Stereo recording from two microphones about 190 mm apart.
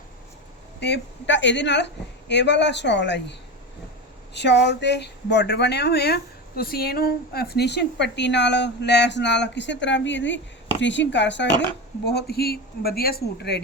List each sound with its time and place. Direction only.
0.8 s speech: 65° left (ahead or behind)
4.4 s a woman's voice: 65° left (ahead or behind)
12.0 s a woman's voice: 60° left (ahead or behind)